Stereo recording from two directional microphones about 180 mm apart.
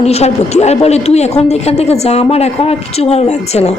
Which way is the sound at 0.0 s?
35° left (ahead or behind).